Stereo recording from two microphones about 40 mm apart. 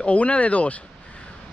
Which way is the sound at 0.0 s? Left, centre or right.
Left.